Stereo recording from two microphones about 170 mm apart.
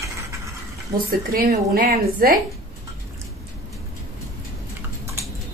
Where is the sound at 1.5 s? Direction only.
55° right (ahead or behind).